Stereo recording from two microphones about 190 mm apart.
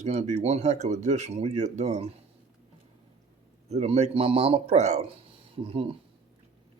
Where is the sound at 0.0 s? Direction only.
40° right (ahead or behind).